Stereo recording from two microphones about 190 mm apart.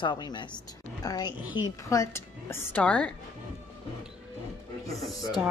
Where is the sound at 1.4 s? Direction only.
10° right (ahead or behind).